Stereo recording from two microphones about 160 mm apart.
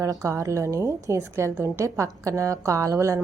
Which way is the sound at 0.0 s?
20° right (ahead or behind).